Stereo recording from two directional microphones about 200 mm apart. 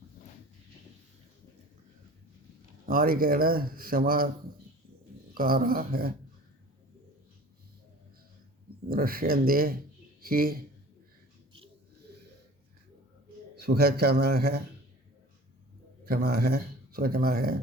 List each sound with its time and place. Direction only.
2.8 s speech: 45° right (ahead or behind)
5.3 s speech: 45° right (ahead or behind)
8.9 s speech: 50° right (ahead or behind)
13.6 s speech: 50° right (ahead or behind)
16.0 s speech: 50° right (ahead or behind)